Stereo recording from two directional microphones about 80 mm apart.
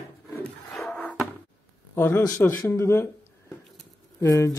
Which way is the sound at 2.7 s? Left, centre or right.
Left.